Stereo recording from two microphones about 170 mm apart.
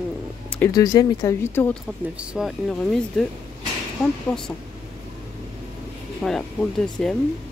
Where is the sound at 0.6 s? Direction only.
20° left (ahead or behind).